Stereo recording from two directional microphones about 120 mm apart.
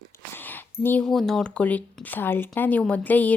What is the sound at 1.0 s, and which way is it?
Speech, 5° left (ahead or behind).